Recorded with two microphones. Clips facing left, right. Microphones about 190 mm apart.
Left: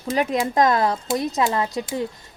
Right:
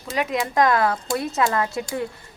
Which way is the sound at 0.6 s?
25° left (ahead or behind).